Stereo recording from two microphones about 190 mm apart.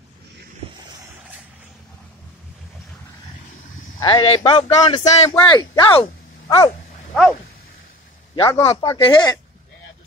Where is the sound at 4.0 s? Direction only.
25° left (ahead or behind).